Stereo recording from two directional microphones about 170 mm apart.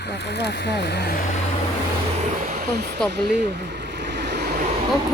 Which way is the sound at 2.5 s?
65° right (ahead or behind).